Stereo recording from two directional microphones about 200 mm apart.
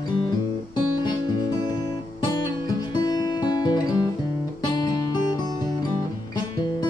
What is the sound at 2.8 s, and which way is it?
Music, 20° left (ahead or behind).